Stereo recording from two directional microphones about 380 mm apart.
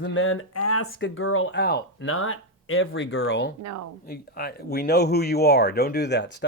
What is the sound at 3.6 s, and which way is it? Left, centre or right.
Speech, right.